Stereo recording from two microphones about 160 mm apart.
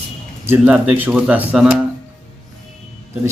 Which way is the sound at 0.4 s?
10° right (ahead or behind).